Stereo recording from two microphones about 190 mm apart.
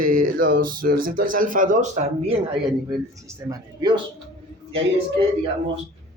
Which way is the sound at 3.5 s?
20° right (ahead or behind).